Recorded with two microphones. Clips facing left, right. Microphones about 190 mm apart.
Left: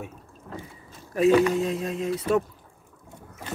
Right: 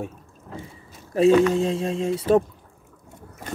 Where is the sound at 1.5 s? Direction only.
30° right (ahead or behind).